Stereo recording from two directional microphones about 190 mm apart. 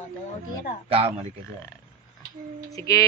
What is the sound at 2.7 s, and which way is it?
Speech, 20° left (ahead or behind).